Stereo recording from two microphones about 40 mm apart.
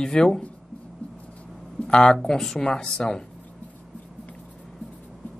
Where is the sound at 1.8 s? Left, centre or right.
Centre.